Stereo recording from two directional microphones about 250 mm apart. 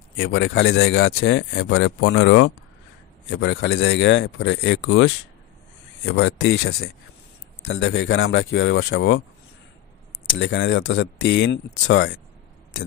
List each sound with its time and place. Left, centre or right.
0.2 s speech: left
10.3 s speech: left